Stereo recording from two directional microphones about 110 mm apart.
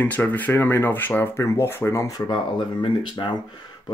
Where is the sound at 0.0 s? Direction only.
15° left (ahead or behind); by 2.3 s 35° left (ahead or behind).